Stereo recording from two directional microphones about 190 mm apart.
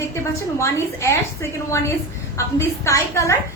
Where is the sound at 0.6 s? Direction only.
15° left (ahead or behind).